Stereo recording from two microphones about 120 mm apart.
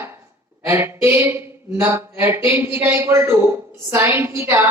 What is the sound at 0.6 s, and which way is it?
A woman's voice, 20° right (ahead or behind).